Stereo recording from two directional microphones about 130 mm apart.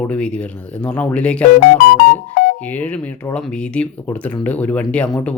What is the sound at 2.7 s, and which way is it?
Speech, 10° left (ahead or behind).